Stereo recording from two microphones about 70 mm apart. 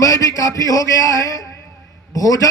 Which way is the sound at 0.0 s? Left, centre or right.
Left.